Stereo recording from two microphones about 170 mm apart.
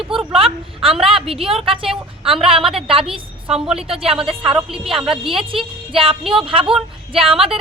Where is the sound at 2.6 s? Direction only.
Centre (ahead or behind).